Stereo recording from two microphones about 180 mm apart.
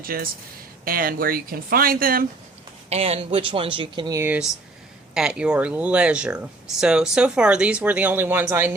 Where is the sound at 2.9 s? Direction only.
35° right (ahead or behind).